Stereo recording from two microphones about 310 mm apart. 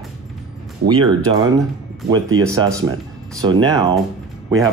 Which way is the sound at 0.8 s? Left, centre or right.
Centre.